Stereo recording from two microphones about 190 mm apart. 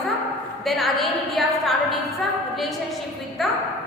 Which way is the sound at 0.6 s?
Centre (ahead or behind).